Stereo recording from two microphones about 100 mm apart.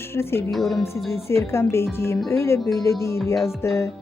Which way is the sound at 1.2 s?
25° left (ahead or behind).